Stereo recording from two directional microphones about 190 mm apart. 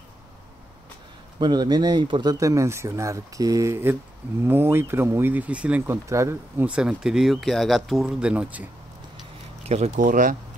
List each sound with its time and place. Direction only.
1.4 s speech: 20° right (ahead or behind)
9.6 s speech: 35° right (ahead or behind)